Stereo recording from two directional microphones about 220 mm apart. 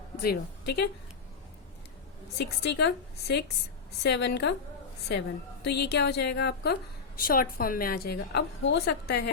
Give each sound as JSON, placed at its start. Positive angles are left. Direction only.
{"t": 0.2, "sound": "a woman's voice", "side_deg": 45}
{"t": 2.4, "sound": "a woman's voice", "side_deg": 50}